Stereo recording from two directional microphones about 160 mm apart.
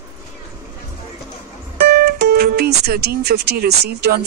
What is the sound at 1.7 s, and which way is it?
Speech, 85° right.